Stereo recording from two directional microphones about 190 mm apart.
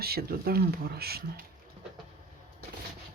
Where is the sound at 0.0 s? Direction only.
55° right (ahead or behind).